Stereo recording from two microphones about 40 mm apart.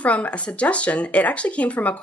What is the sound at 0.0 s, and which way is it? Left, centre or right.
Speech, left.